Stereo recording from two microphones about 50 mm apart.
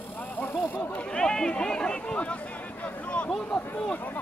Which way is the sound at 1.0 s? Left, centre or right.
Centre.